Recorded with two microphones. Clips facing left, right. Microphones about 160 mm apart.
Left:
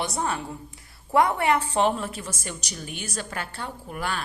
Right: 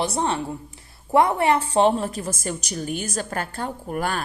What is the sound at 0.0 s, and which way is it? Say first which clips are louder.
A woman's voice: right 4 dB; 25° right (ahead or behind).